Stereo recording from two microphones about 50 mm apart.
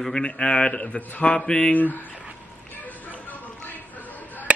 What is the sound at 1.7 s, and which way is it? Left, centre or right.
Speech, left.